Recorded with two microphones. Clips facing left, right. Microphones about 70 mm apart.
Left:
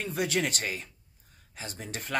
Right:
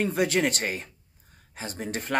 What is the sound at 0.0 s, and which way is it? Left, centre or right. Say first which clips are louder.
Speech: right 5 dB; right.